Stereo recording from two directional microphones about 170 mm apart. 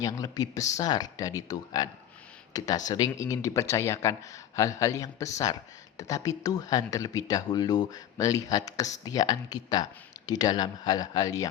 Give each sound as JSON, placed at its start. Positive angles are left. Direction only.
{"t": 0.0, "sound": "speech", "side_deg": 20}